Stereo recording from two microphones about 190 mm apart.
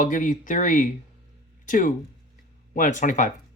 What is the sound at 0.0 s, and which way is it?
Speech, 45° left (ahead or behind).